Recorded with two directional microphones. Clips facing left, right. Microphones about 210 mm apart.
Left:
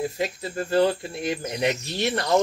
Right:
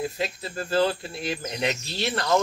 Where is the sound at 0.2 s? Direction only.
15° left (ahead or behind).